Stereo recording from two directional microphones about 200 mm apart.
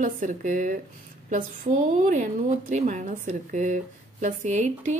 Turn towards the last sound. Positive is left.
turn(degrees=-35)  # may be behind; listen again after turning